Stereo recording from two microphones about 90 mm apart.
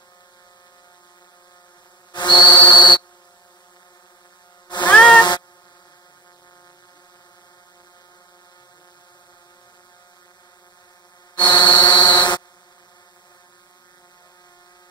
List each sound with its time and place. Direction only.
2.1 s whistle: 55° left (ahead or behind)
4.6 s a sound: 55° left (ahead or behind)
4.9 s meow: 15° left (ahead or behind)
11.3 s buzzer: 55° left (ahead or behind)